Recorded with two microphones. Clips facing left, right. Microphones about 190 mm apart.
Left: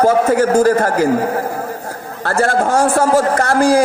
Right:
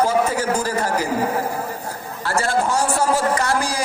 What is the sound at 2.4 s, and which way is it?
A man's voice, 50° left (ahead or behind).